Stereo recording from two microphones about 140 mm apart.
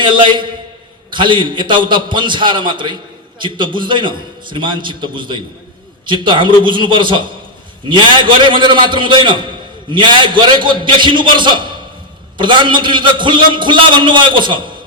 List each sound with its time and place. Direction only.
0.0 s a man's voice: 35° right (ahead or behind)